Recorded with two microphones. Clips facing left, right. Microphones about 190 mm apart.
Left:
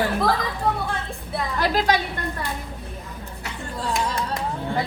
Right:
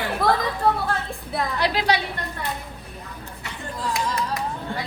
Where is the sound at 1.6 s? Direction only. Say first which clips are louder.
Left 2 dB; 45° left (ahead or behind).